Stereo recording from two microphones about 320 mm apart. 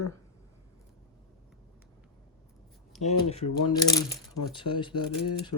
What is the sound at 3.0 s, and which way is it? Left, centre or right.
Speech, centre.